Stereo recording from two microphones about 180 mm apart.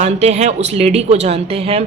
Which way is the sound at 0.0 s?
35° right (ahead or behind).